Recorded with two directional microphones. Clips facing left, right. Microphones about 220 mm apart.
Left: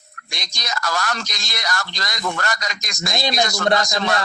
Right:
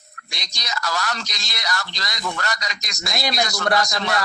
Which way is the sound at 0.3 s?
50° left (ahead or behind).